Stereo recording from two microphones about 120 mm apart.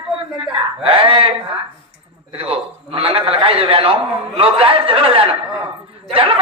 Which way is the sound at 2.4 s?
50° right (ahead or behind).